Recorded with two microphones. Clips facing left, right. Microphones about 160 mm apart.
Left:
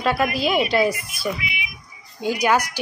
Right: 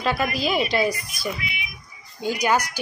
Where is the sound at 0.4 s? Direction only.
Centre (ahead or behind).